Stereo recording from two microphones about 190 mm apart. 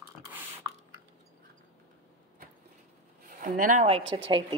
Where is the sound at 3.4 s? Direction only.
45° right (ahead or behind).